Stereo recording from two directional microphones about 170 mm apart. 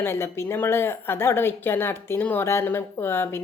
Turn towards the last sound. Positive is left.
turn(degrees=15)  # may be behind; listen again after turning